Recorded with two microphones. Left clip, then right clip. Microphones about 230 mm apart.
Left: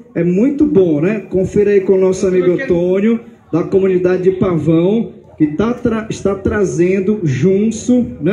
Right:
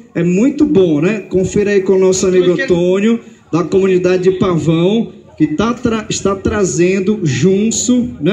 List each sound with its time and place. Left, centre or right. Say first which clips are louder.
0.1 s a man's voice: even; right